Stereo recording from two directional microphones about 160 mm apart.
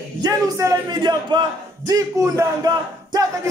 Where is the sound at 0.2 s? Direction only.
25° right (ahead or behind).